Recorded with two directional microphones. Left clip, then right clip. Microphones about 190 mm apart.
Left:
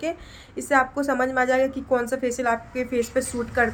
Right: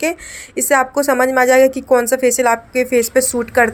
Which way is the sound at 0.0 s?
40° right (ahead or behind).